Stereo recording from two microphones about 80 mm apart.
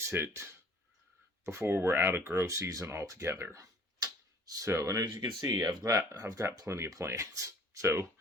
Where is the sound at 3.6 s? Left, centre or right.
Right.